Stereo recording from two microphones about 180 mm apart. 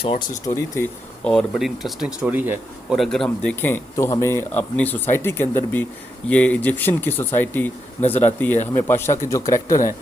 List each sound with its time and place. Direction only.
0.0 s speech: 30° left (ahead or behind)
0.4 s speech: 15° left (ahead or behind); by 3.0 s 10° right (ahead or behind)
3.0 s speech: centre (ahead or behind); by 9.9 s 15° left (ahead or behind)